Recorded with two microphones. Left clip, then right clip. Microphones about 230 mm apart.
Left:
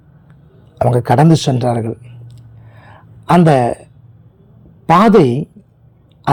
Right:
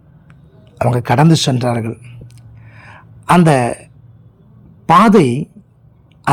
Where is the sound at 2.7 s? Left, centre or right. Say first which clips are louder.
Right 3 dB; centre.